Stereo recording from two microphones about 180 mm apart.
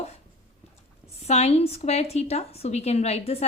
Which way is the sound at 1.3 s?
35° left (ahead or behind).